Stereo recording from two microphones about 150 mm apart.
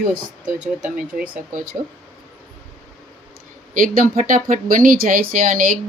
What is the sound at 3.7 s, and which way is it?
Speech, 65° right (ahead or behind).